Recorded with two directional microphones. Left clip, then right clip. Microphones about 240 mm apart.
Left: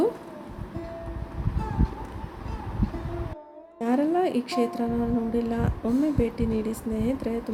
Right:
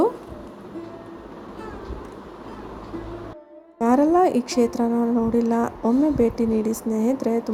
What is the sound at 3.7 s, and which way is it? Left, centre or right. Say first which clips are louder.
A woman's voice: right 7 dB; centre.